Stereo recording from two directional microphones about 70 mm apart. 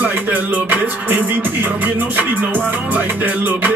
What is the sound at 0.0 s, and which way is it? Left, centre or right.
Music, right.